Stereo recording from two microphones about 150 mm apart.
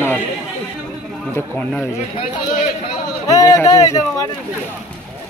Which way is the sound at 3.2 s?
25° left (ahead or behind).